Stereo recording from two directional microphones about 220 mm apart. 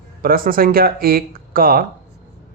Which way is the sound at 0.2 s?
40° right (ahead or behind).